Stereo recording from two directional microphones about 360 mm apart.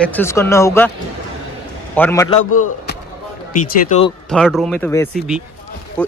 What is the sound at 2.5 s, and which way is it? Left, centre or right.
Speech, left.